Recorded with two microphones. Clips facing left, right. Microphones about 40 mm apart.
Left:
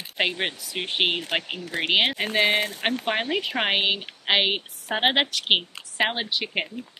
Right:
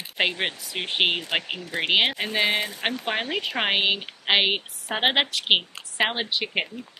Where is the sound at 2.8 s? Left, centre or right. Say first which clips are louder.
Left 2 dB; left.